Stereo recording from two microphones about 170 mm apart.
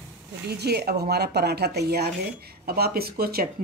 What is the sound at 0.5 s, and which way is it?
Speech, 70° right (ahead or behind).